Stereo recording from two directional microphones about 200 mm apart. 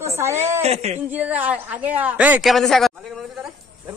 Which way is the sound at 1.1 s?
5° right (ahead or behind).